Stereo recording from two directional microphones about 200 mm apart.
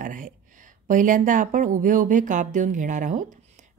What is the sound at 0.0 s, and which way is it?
Speech, 40° right (ahead or behind).